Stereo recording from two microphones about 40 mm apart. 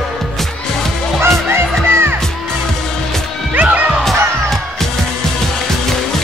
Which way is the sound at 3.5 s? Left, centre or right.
Right.